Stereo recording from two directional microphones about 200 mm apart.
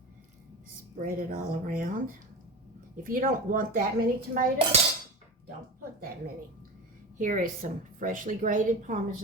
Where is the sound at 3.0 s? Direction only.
45° right (ahead or behind).